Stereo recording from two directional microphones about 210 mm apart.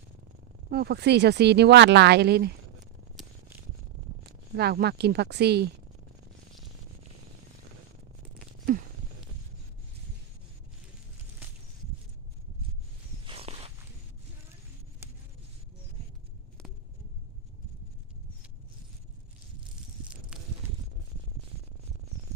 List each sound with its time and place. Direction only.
0.7 s speech: 50° right (ahead or behind)
3.2 s scissors: centre (ahead or behind)
4.5 s speech: 50° right (ahead or behind)
13.2 s walk: 30° right (ahead or behind)
15.0 s a sound: 10° right (ahead or behind)
20.3 s a sound: 5° right (ahead or behind)